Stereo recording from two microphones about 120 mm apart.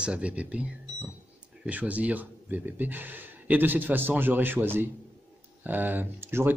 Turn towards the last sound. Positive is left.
turn(degrees=-20)  # may be behind; listen again after turning